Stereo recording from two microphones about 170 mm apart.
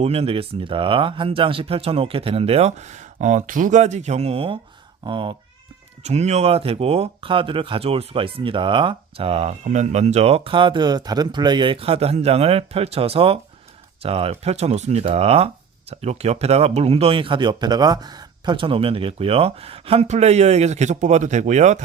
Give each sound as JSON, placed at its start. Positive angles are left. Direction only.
{"t": 0.0, "sound": "speech", "side_deg": -35}
{"t": 6.0, "sound": "speech", "side_deg": -40}